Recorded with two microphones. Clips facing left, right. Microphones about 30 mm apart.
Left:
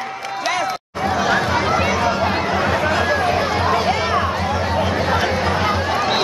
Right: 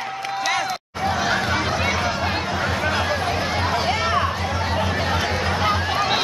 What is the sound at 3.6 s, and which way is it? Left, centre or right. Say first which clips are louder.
Music: left 4 dB; centre.